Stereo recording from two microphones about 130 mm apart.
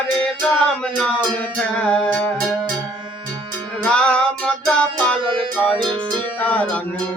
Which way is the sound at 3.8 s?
5° left (ahead or behind).